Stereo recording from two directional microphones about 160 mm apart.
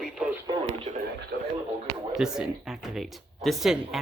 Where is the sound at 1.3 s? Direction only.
90° right.